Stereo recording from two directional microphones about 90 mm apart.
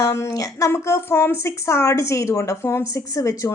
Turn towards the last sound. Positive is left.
turn(degrees=35)  # may be behind; listen again after turning